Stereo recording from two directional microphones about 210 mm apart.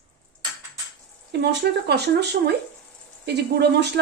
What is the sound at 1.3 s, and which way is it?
Speech, 55° right (ahead or behind).